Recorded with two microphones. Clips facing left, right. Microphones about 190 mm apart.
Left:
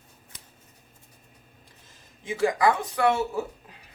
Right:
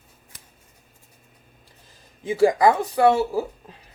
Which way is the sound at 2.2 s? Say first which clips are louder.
Right 6 dB; 35° right (ahead or behind).